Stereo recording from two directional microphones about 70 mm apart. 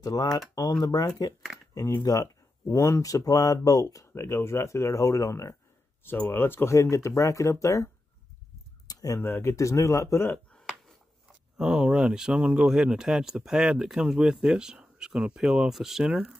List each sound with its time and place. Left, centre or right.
0.0 s speech: left
2.7 s speech: left
3.8 s speech: left
6.2 s speech: left
8.8 s a sound: left
9.2 s speech: left
10.9 s speech: centre